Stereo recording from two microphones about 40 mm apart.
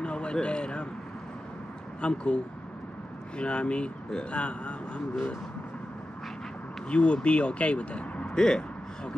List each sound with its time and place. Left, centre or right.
0.0 s a sound: left
2.0 s speech: left
6.9 s speech: left
8.4 s speech: left